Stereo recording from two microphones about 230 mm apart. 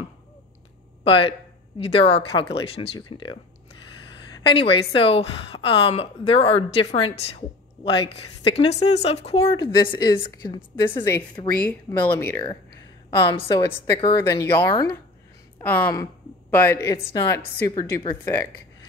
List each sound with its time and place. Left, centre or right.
1.0 s a woman's voice: left
11.4 s a woman's voice: centre
13.2 s a woman's voice: left